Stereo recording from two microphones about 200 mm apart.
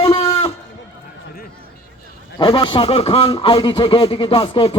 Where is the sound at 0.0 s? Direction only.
30° left (ahead or behind).